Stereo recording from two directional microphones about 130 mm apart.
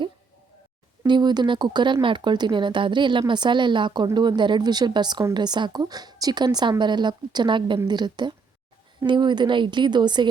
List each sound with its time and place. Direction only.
1.0 s speech: 35° right (ahead or behind)